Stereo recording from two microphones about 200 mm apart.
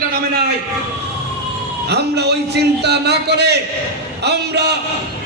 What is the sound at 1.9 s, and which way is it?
A man's voice, 55° right (ahead or behind).